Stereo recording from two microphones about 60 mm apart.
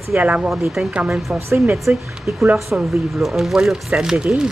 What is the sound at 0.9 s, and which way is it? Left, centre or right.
A woman's voice, right.